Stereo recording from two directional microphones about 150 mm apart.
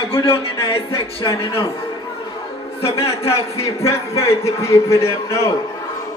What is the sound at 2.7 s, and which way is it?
A man's voice, 40° left (ahead or behind).